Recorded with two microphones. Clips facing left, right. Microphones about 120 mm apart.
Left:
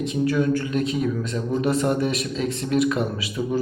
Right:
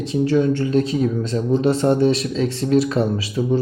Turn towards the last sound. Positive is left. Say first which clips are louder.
# right 4 dB
turn(degrees=-30)  # may be behind; listen again after turning